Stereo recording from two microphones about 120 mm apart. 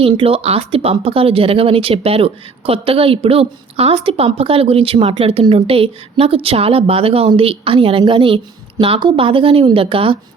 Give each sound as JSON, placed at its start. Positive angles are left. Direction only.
{"t": 0.0, "sound": "speech", "side_deg": -50}